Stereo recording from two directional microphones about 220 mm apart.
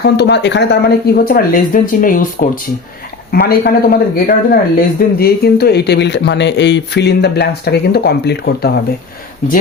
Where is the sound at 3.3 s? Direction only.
45° left (ahead or behind).